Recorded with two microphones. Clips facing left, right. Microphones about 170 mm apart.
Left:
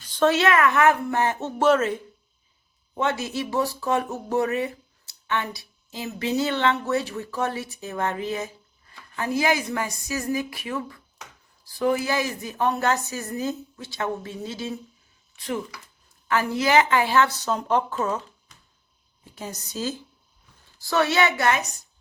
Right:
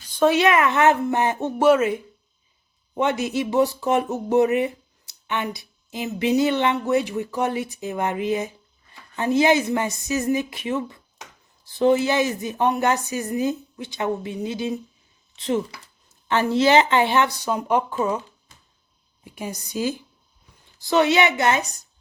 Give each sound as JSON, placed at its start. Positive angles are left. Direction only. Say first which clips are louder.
{"t": 0.1, "sound": "speech", "louder": "right 2 dB", "side_deg": -15}
{"t": 19.2, "sound": "a woman's voice", "louder": "right 4 dB", "side_deg": -15}